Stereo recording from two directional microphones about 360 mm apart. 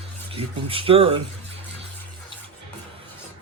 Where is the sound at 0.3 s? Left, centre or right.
Centre.